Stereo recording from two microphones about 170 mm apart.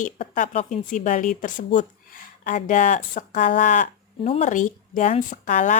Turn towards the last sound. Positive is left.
turn(degrees=50)  # may be behind; listen again after turning